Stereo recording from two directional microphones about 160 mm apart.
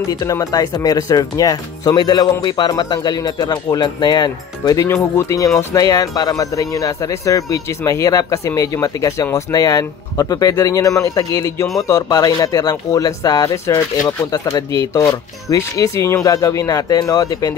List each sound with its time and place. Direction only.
0.1 s speech: 20° left (ahead or behind)